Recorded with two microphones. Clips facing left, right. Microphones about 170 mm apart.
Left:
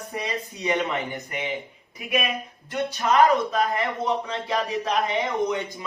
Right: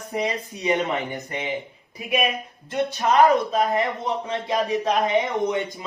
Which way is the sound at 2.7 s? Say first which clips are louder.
Right 2 dB; 20° right (ahead or behind).